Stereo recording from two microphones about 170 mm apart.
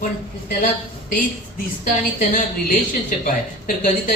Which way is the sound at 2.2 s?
50° left (ahead or behind).